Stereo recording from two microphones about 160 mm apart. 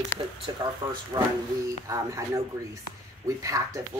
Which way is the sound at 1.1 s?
25° right (ahead or behind).